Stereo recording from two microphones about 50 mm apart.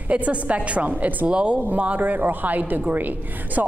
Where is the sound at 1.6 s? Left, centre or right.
Right.